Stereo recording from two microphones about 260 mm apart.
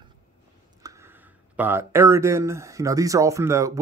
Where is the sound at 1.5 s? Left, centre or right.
Centre.